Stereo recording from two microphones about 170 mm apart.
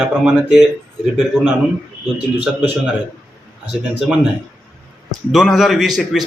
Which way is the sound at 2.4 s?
5° right (ahead or behind).